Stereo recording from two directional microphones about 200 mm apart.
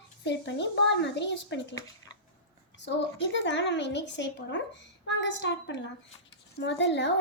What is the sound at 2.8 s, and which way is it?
A child's voice, 65° left (ahead or behind).